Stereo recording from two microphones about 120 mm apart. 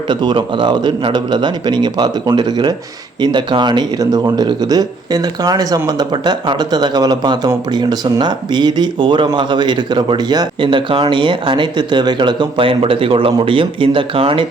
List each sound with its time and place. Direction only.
0.1 s speech: 40° right (ahead or behind)